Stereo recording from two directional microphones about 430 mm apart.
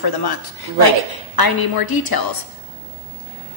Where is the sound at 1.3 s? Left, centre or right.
Left.